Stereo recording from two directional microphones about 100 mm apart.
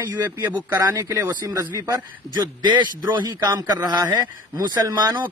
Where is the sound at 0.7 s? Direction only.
30° right (ahead or behind).